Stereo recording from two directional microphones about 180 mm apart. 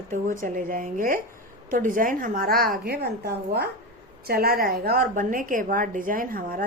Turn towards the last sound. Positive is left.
turn(degrees=-50)  # may be behind; listen again after turning